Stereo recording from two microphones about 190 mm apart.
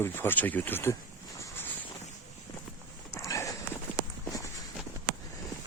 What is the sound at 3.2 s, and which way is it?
Horse, 15° left (ahead or behind).